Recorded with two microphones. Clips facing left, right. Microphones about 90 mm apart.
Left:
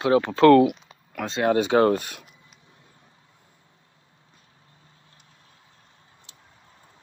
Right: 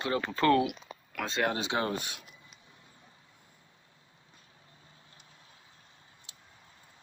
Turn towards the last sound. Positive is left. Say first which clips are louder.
# left 3 dB
turn(degrees=-5)  # may be behind; listen again after turning